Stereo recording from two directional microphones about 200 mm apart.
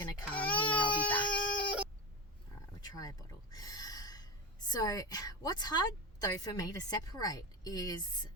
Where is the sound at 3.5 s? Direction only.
20° left (ahead or behind).